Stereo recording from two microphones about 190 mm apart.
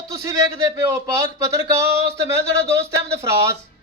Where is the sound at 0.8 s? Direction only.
15° right (ahead or behind).